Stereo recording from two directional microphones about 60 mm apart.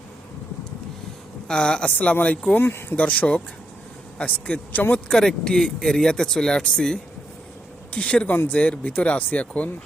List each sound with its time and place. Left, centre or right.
1.5 s speech: centre
2.6 s speech: left
2.9 s speech: centre
5.1 s speech: centre